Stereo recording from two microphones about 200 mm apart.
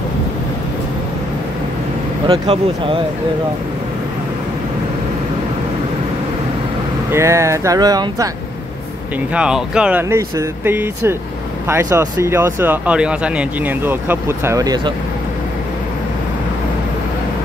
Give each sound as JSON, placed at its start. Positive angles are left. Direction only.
{"t": 2.2, "sound": "speech", "side_deg": -30}
{"t": 7.1, "sound": "speech", "side_deg": -15}
{"t": 9.3, "sound": "speech", "side_deg": -5}